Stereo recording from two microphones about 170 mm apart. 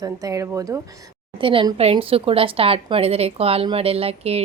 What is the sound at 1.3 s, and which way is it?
Speech, 30° right (ahead or behind).